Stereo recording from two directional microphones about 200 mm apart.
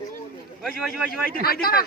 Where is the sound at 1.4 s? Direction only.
50° left (ahead or behind).